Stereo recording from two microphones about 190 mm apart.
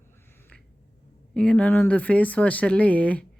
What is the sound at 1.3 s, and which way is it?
Speech, 5° left (ahead or behind).